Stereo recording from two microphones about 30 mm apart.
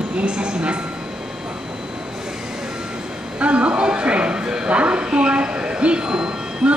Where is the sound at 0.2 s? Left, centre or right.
Right.